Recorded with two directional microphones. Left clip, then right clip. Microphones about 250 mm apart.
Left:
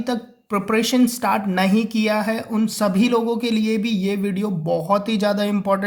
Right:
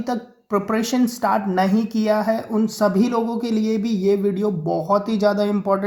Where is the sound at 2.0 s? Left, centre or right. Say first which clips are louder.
Right 4 dB; left.